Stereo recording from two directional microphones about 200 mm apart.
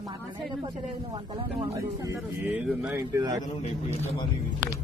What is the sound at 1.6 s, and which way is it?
Speech, 15° right (ahead or behind).